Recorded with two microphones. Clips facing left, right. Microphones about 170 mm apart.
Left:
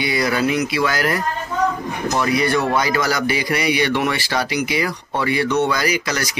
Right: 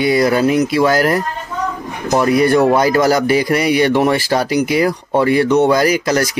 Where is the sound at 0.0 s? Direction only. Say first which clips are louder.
Right 7 dB; 45° right (ahead or behind).